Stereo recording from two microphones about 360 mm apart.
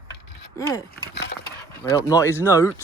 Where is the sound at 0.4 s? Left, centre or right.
Centre.